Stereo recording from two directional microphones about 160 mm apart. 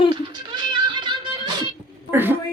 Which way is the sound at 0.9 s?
30° right (ahead or behind).